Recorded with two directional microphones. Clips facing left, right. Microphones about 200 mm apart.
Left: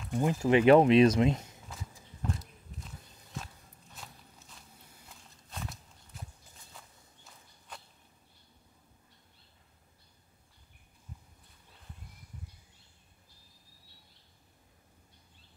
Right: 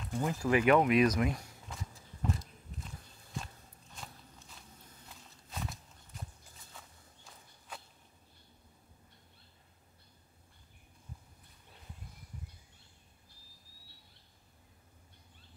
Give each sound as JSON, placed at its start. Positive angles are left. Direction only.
{"t": 0.1, "sound": "speech", "side_deg": 20}
{"t": 1.7, "sound": "walk", "side_deg": 0}
{"t": 3.9, "sound": "walk", "side_deg": 0}